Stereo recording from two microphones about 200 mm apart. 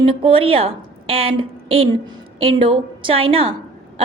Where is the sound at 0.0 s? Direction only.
25° right (ahead or behind).